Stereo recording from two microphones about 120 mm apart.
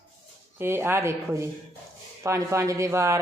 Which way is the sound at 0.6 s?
20° right (ahead or behind).